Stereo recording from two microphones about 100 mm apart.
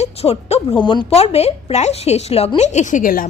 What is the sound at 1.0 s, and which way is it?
A woman's voice, 90° left.